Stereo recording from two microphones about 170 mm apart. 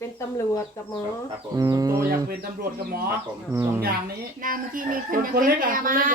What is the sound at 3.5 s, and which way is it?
Speech, 15° right (ahead or behind).